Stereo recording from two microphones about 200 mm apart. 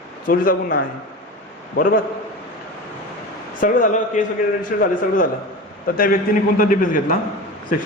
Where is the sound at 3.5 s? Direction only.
40° left (ahead or behind).